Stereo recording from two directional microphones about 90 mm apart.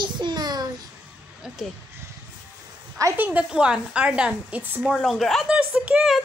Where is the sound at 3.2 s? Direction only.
20° right (ahead or behind).